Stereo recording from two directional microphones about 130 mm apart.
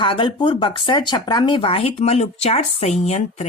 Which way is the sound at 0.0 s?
40° left (ahead or behind).